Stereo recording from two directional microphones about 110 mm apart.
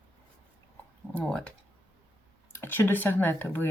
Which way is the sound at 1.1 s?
10° left (ahead or behind).